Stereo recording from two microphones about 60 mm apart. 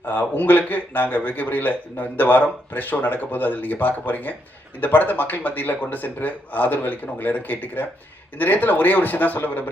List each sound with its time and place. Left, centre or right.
0.0 s speech: left